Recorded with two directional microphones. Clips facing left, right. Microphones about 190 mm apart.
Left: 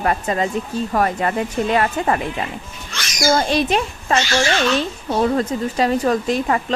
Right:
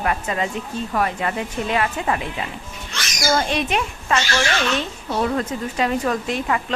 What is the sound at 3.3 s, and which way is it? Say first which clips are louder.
A woman's voice: left 3 dB; 35° left (ahead or behind).